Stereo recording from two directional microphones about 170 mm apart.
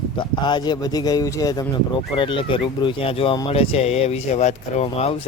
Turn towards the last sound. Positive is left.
turn(degrees=40)  # may be behind; listen again after turning